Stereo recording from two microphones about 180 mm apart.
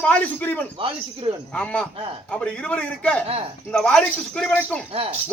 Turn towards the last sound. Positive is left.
turn(degrees=-35)  # may be behind; listen again after turning